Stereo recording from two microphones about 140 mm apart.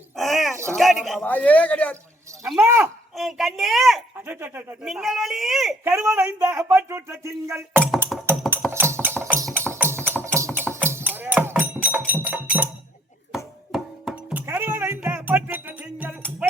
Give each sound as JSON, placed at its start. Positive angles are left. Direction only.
{"t": 0.2, "sound": "a sound", "side_deg": 0}
{"t": 0.5, "sound": "a sound", "side_deg": -20}
{"t": 0.8, "sound": "a sound", "side_deg": 0}
{"t": 1.2, "sound": "a man's voice", "side_deg": 10}
{"t": 2.6, "sound": "speech", "side_deg": -20}
{"t": 3.2, "sound": "speech", "side_deg": 0}
{"t": 4.3, "sound": "speech", "side_deg": -15}
{"t": 4.8, "sound": "speech", "side_deg": -5}
{"t": 5.8, "sound": "speech", "side_deg": -20}
{"t": 8.3, "sound": "a sound", "side_deg": -15}
{"t": 9.6, "sound": "music", "side_deg": -10}
{"t": 10.1, "sound": "clip-clop", "side_deg": -15}
{"t": 13.3, "sound": "chopping", "side_deg": 0}
{"t": 14.4, "sound": "music", "side_deg": -15}